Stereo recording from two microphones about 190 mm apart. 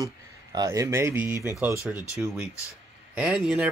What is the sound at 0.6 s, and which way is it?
Speech, 15° right (ahead or behind).